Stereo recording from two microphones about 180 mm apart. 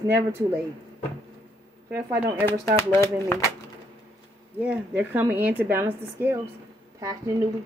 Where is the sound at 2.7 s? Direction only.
15° left (ahead or behind).